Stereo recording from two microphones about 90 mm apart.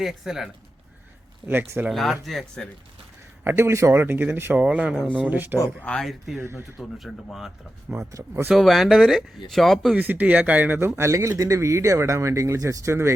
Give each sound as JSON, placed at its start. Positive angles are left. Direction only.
{"t": 0.0, "sound": "speech", "side_deg": -5}
{"t": 1.5, "sound": "speech", "side_deg": -20}
{"t": 1.9, "sound": "speech", "side_deg": 0}
{"t": 3.4, "sound": "speech", "side_deg": -30}
{"t": 4.6, "sound": "speech", "side_deg": -10}
{"t": 5.8, "sound": "speech", "side_deg": 5}
{"t": 6.4, "sound": "speech", "side_deg": -25}
{"t": 6.7, "sound": "speech", "side_deg": 0}
{"t": 7.9, "sound": "speech", "side_deg": -30}
{"t": 8.4, "sound": "speech", "side_deg": 0}
{"t": 9.9, "sound": "a man's voice", "side_deg": -20}